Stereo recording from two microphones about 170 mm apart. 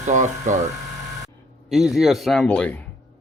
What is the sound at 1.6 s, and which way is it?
A man's voice, centre (ahead or behind).